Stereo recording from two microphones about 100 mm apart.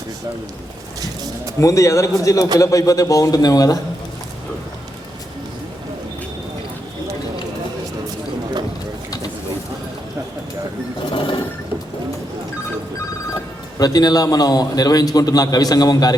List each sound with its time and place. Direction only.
1.6 s a man's voice: 30° left (ahead or behind)
11.1 s mechanisms: 60° left (ahead or behind)
13.3 s a man's voice: 40° left (ahead or behind)